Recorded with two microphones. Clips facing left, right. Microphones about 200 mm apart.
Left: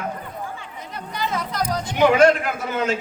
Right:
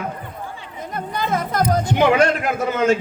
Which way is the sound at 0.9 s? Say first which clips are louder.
Right 4 dB; 50° right (ahead or behind).